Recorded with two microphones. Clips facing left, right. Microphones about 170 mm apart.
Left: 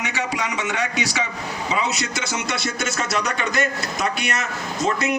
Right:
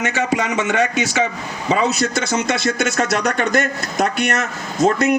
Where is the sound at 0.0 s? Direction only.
50° right (ahead or behind).